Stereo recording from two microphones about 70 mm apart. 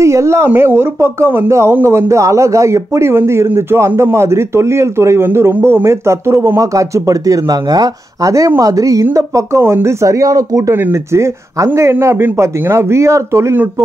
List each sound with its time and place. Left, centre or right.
0.0 s speech: right
6.6 s a woman's voice: right
9.6 s speech: right
10.7 s speech: right